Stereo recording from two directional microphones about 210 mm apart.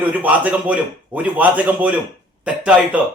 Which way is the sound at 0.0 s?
5° right (ahead or behind).